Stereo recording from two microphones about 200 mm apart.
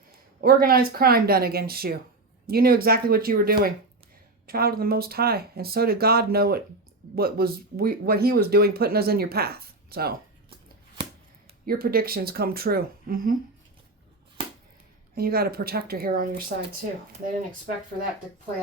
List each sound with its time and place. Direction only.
0.4 s speech: 45° right (ahead or behind)
11.6 s speech: 50° right (ahead or behind)
15.1 s speech: 50° right (ahead or behind)